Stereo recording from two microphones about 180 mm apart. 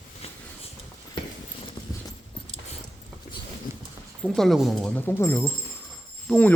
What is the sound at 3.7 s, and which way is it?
Clip-clop, 15° right (ahead or behind).